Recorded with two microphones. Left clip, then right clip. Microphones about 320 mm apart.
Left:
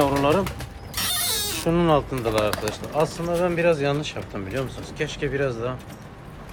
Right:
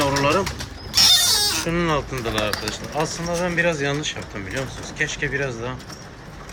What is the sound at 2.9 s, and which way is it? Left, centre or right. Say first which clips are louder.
Speech: left 2 dB; centre.